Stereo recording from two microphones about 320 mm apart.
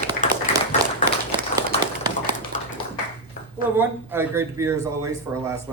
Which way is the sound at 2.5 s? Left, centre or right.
Left.